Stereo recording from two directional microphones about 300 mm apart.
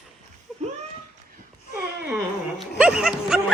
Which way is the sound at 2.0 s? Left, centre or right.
Centre.